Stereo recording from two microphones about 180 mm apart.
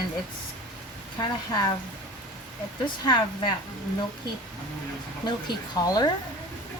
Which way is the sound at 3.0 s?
25° left (ahead or behind).